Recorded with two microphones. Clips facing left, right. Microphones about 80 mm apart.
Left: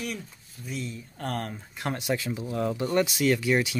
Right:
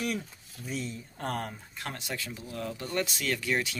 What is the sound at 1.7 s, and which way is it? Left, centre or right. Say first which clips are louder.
Speech: left 9 dB; centre.